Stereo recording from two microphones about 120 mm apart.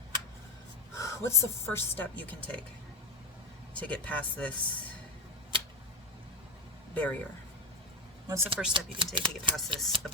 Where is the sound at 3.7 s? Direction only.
10° left (ahead or behind).